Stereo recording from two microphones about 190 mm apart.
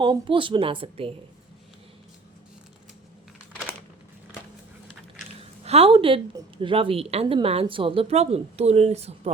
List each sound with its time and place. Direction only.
0.0 s speech: 25° right (ahead or behind)
5.4 s a sound: 30° right (ahead or behind)
6.3 s a woman's voice: 25° right (ahead or behind)